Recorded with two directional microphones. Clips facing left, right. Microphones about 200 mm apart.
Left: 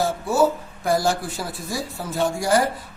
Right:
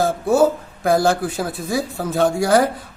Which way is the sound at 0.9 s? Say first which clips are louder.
Right 5 dB; 55° right (ahead or behind).